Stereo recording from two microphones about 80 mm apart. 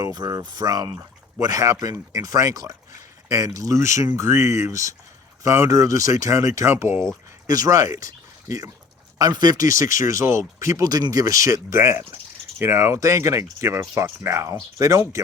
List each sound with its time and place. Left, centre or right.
0.3 s speech: right
7.4 s speech: right
11.7 s speech: right